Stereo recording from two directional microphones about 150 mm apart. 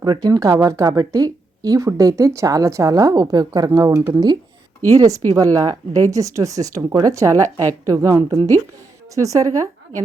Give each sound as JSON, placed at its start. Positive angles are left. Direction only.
{"t": 0.0, "sound": "speech", "side_deg": -25}